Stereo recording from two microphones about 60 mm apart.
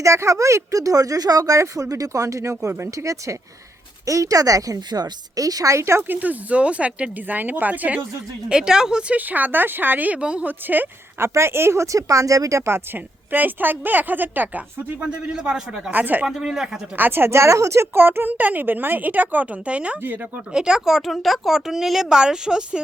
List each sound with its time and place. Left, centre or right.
0.0 s speech: right
1.6 s a woman's voice: right
5.7 s speech: right
6.1 s speech: right
8.4 s speech: centre
11.2 s speech: right
13.3 s a woman's voice: right
15.0 s speech: centre
15.9 s speech: right
16.2 s speech: centre
17.0 s a woman's voice: right; by 20.0 s centre
20.0 s a woman's voice: right
20.5 s speech: centre